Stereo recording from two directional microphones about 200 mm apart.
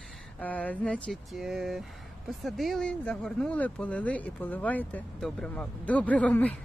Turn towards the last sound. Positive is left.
turn(degrees=5)  # may be behind; listen again after turning